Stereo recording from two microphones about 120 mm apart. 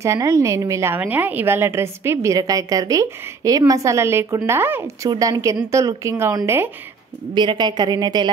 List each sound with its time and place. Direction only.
0.0 s a woman's voice: 25° right (ahead or behind)
5.1 s a woman's voice: 40° right (ahead or behind)
5.7 s a woman's voice: 25° right (ahead or behind)
7.3 s a woman's voice: 40° right (ahead or behind)